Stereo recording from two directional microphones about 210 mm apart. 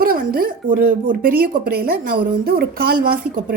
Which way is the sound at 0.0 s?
45° right (ahead or behind).